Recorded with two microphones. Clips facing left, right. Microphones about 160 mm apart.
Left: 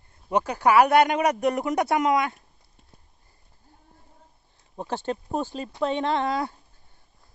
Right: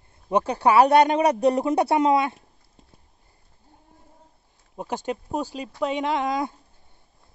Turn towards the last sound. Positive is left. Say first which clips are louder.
# even
turn(degrees=-15)  # may be behind; listen again after turning